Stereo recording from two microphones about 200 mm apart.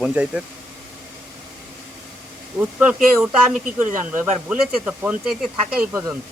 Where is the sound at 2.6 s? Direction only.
5° right (ahead or behind).